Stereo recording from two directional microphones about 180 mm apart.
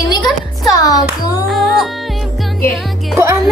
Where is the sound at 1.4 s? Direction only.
Centre (ahead or behind).